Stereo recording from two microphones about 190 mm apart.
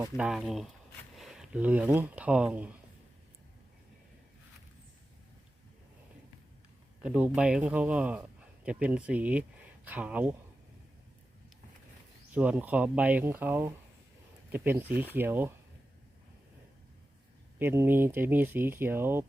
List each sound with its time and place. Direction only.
0.2 s speech: 5° right (ahead or behind)
7.0 s speech: 5° right (ahead or behind)
12.3 s speech: 10° right (ahead or behind)
17.6 s speech: 10° right (ahead or behind)